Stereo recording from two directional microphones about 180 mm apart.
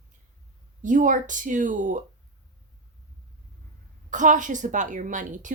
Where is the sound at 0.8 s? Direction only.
45° right (ahead or behind).